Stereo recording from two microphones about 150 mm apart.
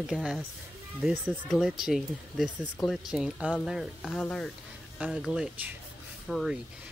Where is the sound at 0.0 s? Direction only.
Centre (ahead or behind).